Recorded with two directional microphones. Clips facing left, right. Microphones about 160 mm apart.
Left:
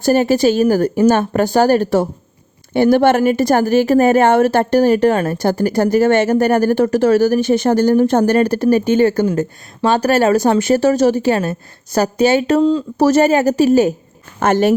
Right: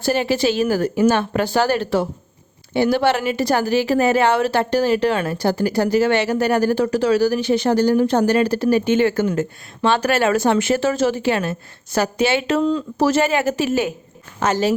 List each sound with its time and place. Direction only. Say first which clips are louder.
0.0 s a woman's voice: left 6 dB; 45° left (ahead or behind)
14.3 s speech: left 5 dB; 55° left (ahead or behind)